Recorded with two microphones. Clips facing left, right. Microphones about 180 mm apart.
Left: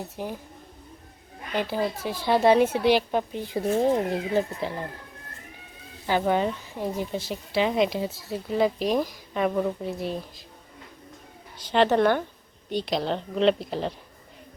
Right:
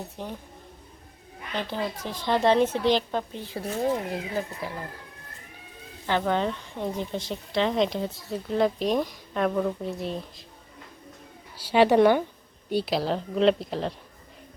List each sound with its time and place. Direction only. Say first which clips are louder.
0.2 s speech: left 4 dB; 10° left (ahead or behind)
1.5 s speech: left 4 dB; 10° left (ahead or behind)
3.9 s speech: left 5 dB; 30° left (ahead or behind)
6.1 s speech: left 2 dB; 10° left (ahead or behind)
11.5 s a woman's voice: right 2 dB; 10° right (ahead or behind)